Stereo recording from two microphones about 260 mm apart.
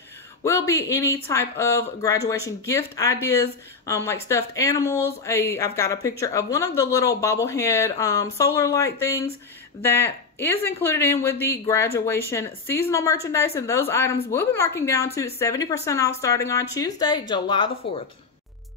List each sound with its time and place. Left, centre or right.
0.4 s speech: centre